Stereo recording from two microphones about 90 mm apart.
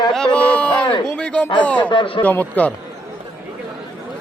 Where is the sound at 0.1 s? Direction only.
10° left (ahead or behind).